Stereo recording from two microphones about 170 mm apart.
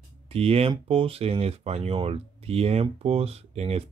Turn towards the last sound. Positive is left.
turn(degrees=-35)  # may be behind; listen again after turning